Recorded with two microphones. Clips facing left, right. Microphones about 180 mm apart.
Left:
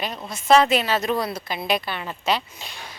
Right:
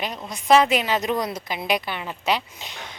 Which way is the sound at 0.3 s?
15° right (ahead or behind).